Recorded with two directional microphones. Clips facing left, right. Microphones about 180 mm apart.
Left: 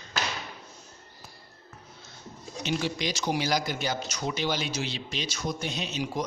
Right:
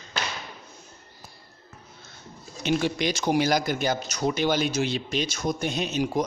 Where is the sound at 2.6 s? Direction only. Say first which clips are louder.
Right 5 dB; 55° right (ahead or behind).